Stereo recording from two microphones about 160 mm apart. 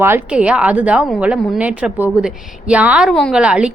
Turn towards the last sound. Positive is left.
turn(degrees=-5)  # may be behind; listen again after turning